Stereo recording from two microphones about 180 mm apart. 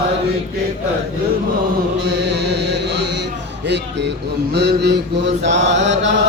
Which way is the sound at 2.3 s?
70° right (ahead or behind).